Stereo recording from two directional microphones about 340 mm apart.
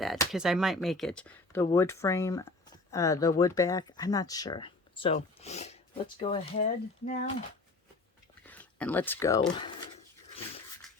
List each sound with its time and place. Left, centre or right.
0.0 s speech: centre; by 7.3 s left
8.4 s speech: centre